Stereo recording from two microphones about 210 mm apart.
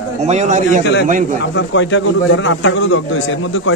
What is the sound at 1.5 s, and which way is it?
A man's voice, 60° left (ahead or behind).